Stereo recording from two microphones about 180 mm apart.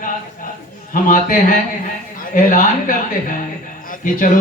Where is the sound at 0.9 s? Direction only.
50° left (ahead or behind).